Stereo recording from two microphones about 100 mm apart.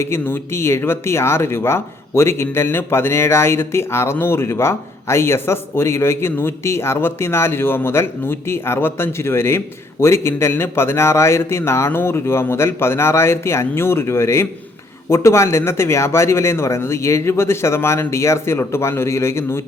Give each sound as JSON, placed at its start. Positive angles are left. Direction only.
{"t": 0.0, "sound": "speech", "side_deg": 25}